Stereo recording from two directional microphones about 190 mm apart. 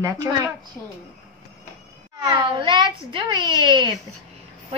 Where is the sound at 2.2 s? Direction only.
25° right (ahead or behind).